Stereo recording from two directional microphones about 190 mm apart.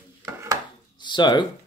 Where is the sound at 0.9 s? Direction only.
25° left (ahead or behind).